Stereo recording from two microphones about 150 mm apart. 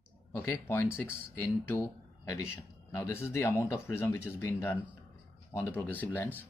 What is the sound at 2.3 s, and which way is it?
Speech, 20° left (ahead or behind).